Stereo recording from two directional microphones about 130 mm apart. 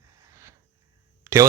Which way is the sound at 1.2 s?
25° right (ahead or behind).